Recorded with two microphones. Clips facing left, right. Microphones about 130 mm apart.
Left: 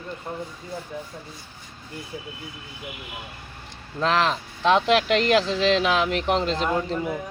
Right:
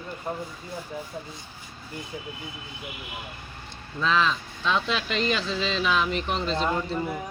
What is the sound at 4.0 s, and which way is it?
Speech, 75° left (ahead or behind).